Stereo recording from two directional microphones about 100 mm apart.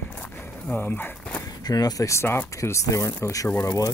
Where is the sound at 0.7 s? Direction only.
20° left (ahead or behind).